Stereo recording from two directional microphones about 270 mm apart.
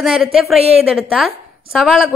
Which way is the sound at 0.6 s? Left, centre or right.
Right.